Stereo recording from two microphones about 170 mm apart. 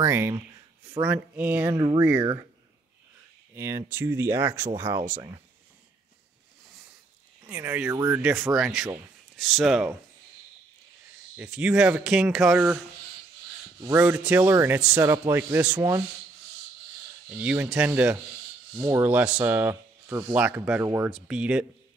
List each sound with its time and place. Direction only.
0.0 s a man's voice: 15° right (ahead or behind)
1.8 s speech: 20° right (ahead or behind)
3.5 s a man's voice: 15° right (ahead or behind)
7.4 s a man's voice: 10° right (ahead or behind)
8.2 s a man's voice: 5° right (ahead or behind)
11.3 s a man's voice: 5° right (ahead or behind)
17.3 s a man's voice: 10° right (ahead or behind)
20.3 s a man's voice: 10° right (ahead or behind)
21.1 s speech: 5° right (ahead or behind)